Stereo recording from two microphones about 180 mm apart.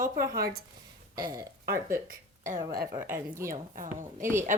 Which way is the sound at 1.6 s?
50° right (ahead or behind).